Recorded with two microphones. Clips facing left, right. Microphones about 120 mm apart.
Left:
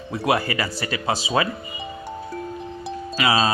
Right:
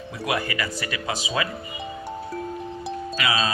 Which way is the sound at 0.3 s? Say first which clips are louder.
Left 4 dB; 35° left (ahead or behind).